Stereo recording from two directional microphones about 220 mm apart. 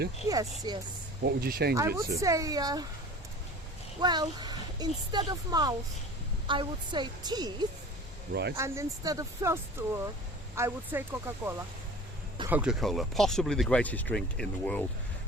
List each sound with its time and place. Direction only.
0.3 s speech: 15° right (ahead or behind)
1.2 s speech: 45° right (ahead or behind)
1.7 s speech: 15° right (ahead or behind)
4.0 s speech: 20° right (ahead or behind)
8.3 s speech: 50° right (ahead or behind)
8.5 s speech: 10° right (ahead or behind)
12.5 s speech: 5° right (ahead or behind)